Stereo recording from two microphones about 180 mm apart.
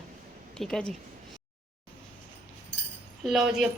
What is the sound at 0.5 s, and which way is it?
Speech, 5° left (ahead or behind).